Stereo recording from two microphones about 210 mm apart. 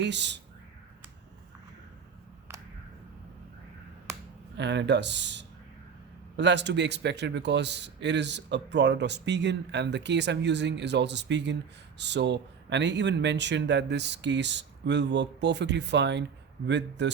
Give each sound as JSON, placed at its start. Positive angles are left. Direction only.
{"t": 0.0, "sound": "a man's voice", "side_deg": -55}
{"t": 4.5, "sound": "a man's voice", "side_deg": -55}